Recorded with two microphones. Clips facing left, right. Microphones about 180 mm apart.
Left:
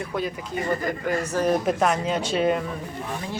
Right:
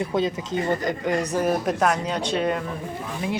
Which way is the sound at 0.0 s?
25° right (ahead or behind).